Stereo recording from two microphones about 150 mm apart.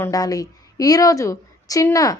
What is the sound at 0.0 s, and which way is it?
A woman's voice, 25° left (ahead or behind).